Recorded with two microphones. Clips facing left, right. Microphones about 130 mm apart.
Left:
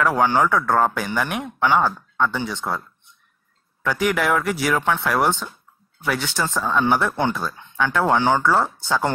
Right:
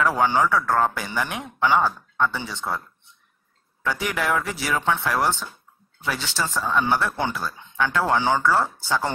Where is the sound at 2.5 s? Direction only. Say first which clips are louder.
Left 2 dB; 15° left (ahead or behind).